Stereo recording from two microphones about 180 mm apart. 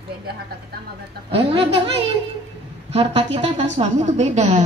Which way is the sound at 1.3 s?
30° right (ahead or behind).